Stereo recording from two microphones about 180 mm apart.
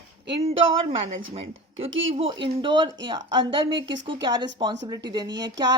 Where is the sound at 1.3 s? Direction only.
35° right (ahead or behind).